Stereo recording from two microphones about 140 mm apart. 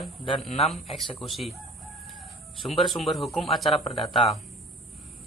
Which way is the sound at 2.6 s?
Centre (ahead or behind).